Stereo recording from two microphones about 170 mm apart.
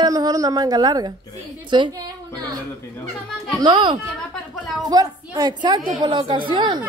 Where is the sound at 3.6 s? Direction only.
25° right (ahead or behind).